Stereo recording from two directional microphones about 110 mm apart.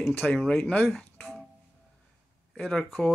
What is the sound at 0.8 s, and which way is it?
Music, centre (ahead or behind).